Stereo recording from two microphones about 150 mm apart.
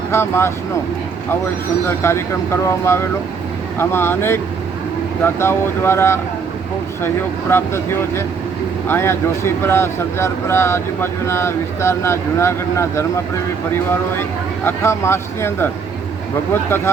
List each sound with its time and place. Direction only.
0.1 s speech: 15° left (ahead or behind)
2.0 s speech: 15° left (ahead or behind)
7.5 s speech: 15° left (ahead or behind)
14.2 s speech: 15° left (ahead or behind)